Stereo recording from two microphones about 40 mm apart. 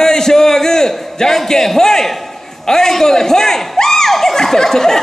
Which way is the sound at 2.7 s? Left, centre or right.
Centre.